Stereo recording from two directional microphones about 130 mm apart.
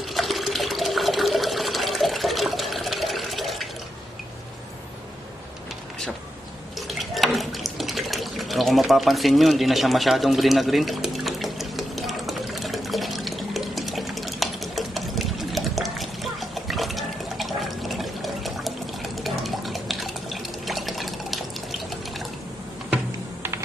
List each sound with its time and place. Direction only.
0.1 s water: centre (ahead or behind)
6.9 s water: centre (ahead or behind)